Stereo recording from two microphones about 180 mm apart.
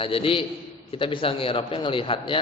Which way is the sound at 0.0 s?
30° left (ahead or behind).